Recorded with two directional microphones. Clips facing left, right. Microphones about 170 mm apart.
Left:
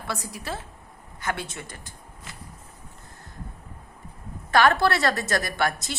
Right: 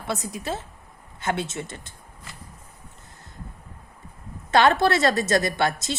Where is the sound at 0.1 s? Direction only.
20° right (ahead or behind).